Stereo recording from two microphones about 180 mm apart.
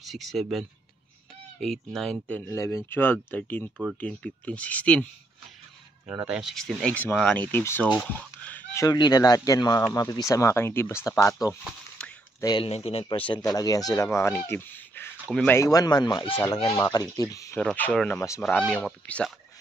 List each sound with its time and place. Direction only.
0.0 s speech: centre (ahead or behind)
6.0 s speech: 5° right (ahead or behind); by 7.9 s 10° left (ahead or behind)
8.0 s fowl: 10° left (ahead or behind)
8.8 s speech: 25° left (ahead or behind)
12.0 s a sound: 5° left (ahead or behind)
12.4 s speech: 25° left (ahead or behind)
13.3 s speech: 20° left (ahead or behind)
17.6 s speech: 10° left (ahead or behind)